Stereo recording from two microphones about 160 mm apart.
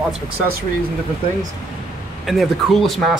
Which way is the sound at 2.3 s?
Centre (ahead or behind).